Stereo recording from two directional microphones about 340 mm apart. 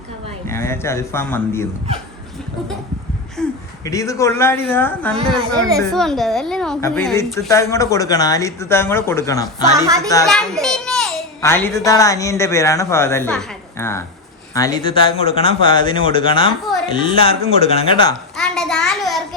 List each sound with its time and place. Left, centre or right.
0.4 s a woman's voice: centre
3.4 s a sound: centre
3.8 s a woman's voice: centre
9.7 s a child's voice: centre
10.1 s a child's voice: centre
18.3 s a sound: centre